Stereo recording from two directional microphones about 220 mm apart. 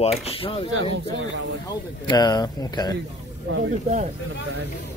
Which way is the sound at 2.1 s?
20° left (ahead or behind).